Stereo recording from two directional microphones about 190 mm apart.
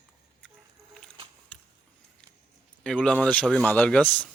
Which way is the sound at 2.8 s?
5° left (ahead or behind).